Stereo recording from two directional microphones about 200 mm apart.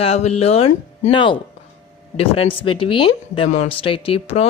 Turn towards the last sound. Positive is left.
turn(degrees=30)  # may be behind; listen again after turning